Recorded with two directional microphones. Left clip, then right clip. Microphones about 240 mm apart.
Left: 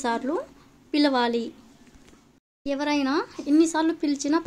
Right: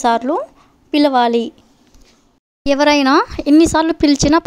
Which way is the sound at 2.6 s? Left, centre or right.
Right.